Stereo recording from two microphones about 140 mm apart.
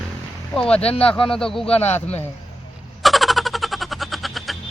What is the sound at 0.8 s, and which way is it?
Speech, 45° left (ahead or behind).